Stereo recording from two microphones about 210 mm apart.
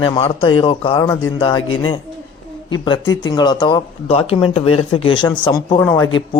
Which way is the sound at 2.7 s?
20° left (ahead or behind).